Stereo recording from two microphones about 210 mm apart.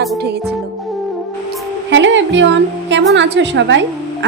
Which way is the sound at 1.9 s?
60° right (ahead or behind).